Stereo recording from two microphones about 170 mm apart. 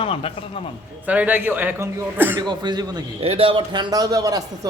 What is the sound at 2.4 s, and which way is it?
A man's voice, 25° right (ahead or behind).